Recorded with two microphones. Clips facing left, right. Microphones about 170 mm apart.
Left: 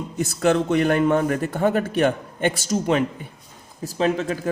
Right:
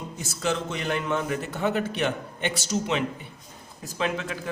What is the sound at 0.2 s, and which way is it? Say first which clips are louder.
Speech: left 9 dB; 55° left (ahead or behind).